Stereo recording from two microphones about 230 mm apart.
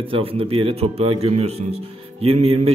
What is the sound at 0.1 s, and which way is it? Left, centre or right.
A man's voice, right.